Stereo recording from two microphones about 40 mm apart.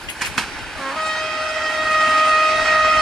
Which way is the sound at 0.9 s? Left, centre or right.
Centre.